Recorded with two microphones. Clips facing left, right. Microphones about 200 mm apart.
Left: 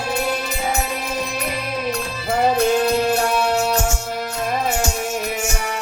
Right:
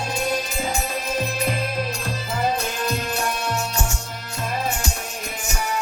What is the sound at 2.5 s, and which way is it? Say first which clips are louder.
Music: left 9 dB; 65° left (ahead or behind).